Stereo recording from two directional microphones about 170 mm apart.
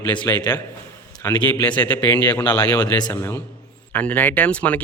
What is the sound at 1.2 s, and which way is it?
A man's voice, 10° left (ahead or behind).